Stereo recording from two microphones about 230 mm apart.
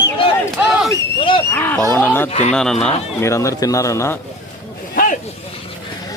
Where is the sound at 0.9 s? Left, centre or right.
Left.